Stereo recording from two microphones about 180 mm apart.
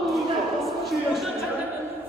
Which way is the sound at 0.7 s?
Centre (ahead or behind).